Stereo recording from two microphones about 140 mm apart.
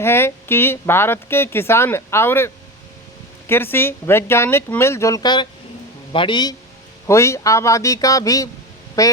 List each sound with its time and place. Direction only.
0.0 s a man's voice: 15° left (ahead or behind)
7.1 s speech: 20° left (ahead or behind)